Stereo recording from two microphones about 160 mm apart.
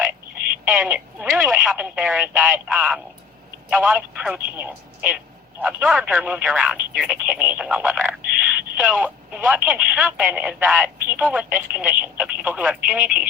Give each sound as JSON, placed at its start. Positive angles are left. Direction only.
{"t": 0.8, "sound": "speech", "side_deg": -10}
{"t": 8.0, "sound": "a sound", "side_deg": -10}
{"t": 8.9, "sound": "speech", "side_deg": -5}